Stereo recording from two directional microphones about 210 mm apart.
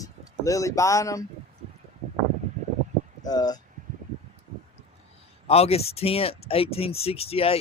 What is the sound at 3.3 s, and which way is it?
Speech, 20° left (ahead or behind).